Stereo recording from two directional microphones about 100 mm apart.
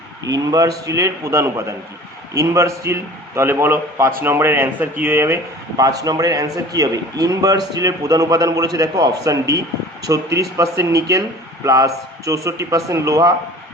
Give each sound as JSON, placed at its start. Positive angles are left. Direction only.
{"t": 0.3, "sound": "a man's voice", "side_deg": -40}
{"t": 5.7, "sound": "a man's voice", "side_deg": -40}